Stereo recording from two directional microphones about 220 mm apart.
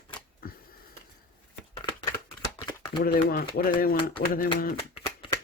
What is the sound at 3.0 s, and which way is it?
Speech, 45° left (ahead or behind).